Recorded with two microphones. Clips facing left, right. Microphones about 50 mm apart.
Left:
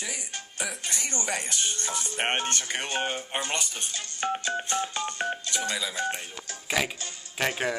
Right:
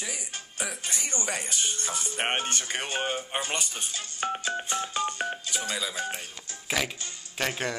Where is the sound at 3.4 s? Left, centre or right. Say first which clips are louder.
Left 1 dB; centre.